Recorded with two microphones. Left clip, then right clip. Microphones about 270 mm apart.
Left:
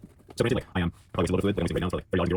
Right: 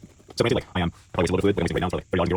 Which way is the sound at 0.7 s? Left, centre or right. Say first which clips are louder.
Right 4 dB; right.